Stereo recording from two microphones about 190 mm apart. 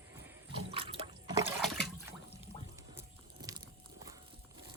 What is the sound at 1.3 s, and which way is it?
Liquid, 15° right (ahead or behind).